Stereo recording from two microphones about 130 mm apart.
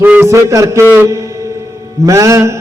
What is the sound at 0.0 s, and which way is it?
A man's voice, 15° right (ahead or behind).